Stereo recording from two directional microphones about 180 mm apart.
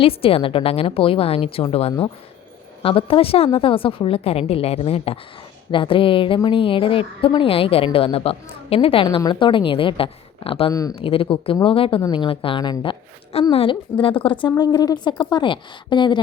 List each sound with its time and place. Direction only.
0.0 s a woman's voice: 30° left (ahead or behind)
10.7 s a woman's voice: 20° left (ahead or behind)
11.0 s a woman's voice: 30° left (ahead or behind)